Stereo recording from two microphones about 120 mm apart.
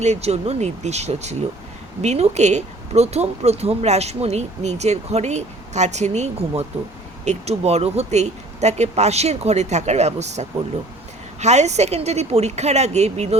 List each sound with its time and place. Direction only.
0.0 s speech: 65° right (ahead or behind)